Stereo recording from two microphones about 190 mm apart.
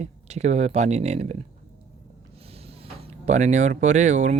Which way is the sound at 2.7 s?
30° right (ahead or behind).